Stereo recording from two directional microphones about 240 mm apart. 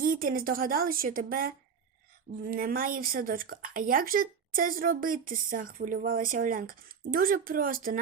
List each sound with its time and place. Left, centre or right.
0.0 s speech: right